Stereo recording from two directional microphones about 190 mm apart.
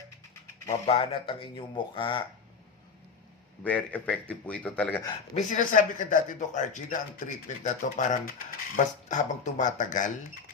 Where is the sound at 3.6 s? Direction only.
10° left (ahead or behind).